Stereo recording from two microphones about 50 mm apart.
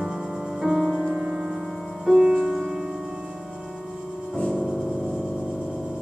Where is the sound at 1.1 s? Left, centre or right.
Right.